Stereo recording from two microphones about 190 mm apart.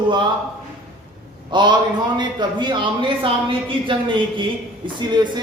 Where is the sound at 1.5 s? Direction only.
25° right (ahead or behind).